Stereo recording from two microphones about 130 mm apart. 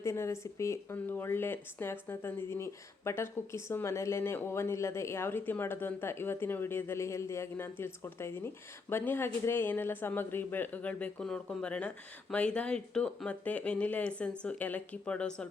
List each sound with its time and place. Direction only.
0.0 s speech: 20° left (ahead or behind)